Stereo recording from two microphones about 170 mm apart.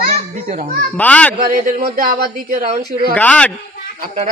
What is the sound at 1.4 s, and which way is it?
A man's voice, 60° right (ahead or behind).